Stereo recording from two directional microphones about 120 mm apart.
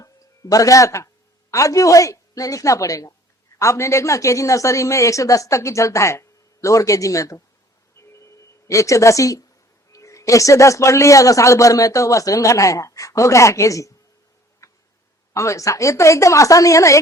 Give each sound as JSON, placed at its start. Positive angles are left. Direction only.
{"t": 0.0, "sound": "a man's voice", "side_deg": 30}
{"t": 8.1, "sound": "telephone", "side_deg": 25}
{"t": 9.9, "sound": "a man's voice", "side_deg": 25}
{"t": 14.6, "sound": "tick-tock", "side_deg": 25}
{"t": 15.3, "sound": "a man's voice", "side_deg": 25}